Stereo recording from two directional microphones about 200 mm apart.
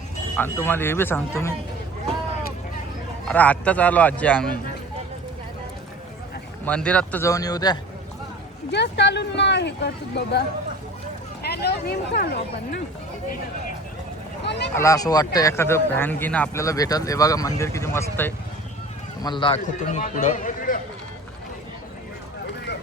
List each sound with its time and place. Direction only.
0.3 s speech: 10° left (ahead or behind)
3.2 s speech: 5° left (ahead or behind)
6.7 s speech: 5° left (ahead or behind)
8.7 s speech: 60° left (ahead or behind)
11.4 s speech: 55° left (ahead or behind)
14.4 s a sound: 60° left (ahead or behind)
14.8 s speech: 15° left (ahead or behind)
19.2 s a man's voice: 25° left (ahead or behind)
19.8 s speech: 40° left (ahead or behind)